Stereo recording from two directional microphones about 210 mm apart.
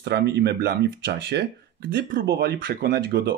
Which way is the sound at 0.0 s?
55° right (ahead or behind).